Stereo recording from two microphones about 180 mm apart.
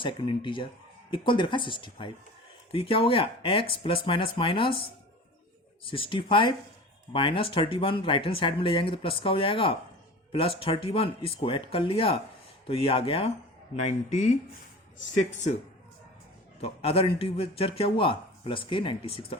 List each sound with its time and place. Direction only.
0.0 s a man's voice: 25° left (ahead or behind)
16.6 s a man's voice: 35° left (ahead or behind)